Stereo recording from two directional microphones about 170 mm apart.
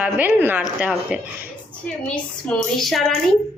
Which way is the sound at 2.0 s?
5° left (ahead or behind).